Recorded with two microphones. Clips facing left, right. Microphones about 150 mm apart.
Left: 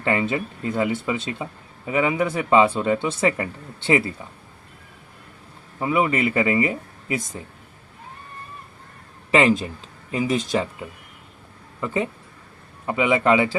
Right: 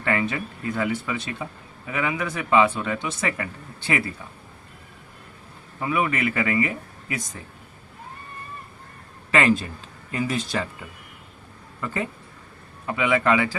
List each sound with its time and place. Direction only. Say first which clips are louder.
0.0 s speech: left 3 dB; 25° left (ahead or behind)
5.8 s speech: left 3 dB; 25° left (ahead or behind)
9.3 s speech: left 3 dB; 20° left (ahead or behind)
12.8 s speech: left 2 dB; 20° left (ahead or behind)